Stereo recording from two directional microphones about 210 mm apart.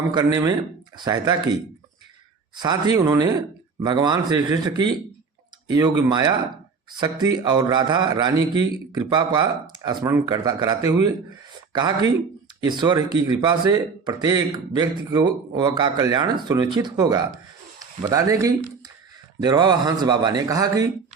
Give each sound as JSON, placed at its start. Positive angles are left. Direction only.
{"t": 0.2, "sound": "speech", "side_deg": -20}
{"t": 2.6, "sound": "speech", "side_deg": -20}